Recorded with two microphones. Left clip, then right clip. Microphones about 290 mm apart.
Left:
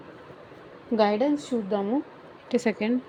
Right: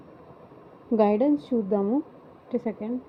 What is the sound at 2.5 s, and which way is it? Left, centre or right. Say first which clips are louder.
Speech: left 5 dB; left.